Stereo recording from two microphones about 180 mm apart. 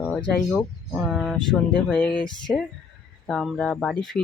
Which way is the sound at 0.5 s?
5° right (ahead or behind).